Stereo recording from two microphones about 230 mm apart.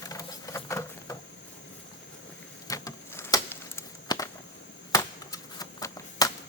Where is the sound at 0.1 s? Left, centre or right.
Centre.